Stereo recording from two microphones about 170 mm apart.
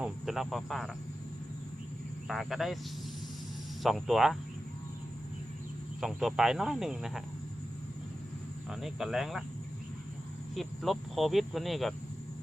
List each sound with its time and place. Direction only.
0.0 s speech: centre (ahead or behind)
2.2 s speech: centre (ahead or behind)
3.8 s speech: centre (ahead or behind)
6.0 s speech: centre (ahead or behind)
8.7 s speech: centre (ahead or behind)
10.5 s speech: centre (ahead or behind)